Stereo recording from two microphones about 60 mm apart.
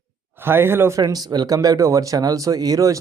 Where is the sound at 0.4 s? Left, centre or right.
Right.